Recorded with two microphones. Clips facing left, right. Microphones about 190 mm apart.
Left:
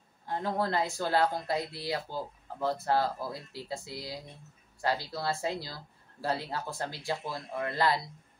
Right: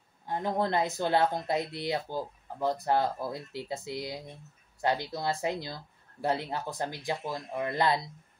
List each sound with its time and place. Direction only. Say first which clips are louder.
0.3 s speech: right 2 dB; 20° right (ahead or behind)